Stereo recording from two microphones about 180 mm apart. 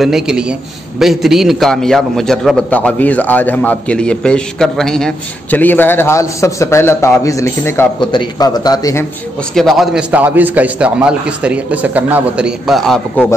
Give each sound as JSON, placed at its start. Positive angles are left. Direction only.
{"t": 0.0, "sound": "a man's voice", "side_deg": -5}
{"t": 8.0, "sound": "a man's voice", "side_deg": 25}
{"t": 9.5, "sound": "a man's voice", "side_deg": 0}